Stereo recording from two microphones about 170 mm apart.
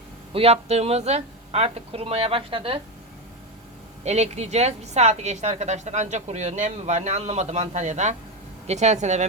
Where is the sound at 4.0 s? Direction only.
40° right (ahead or behind).